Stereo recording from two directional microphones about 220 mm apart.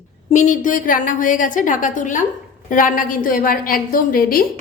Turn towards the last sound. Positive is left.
turn(degrees=40)  # may be behind; listen again after turning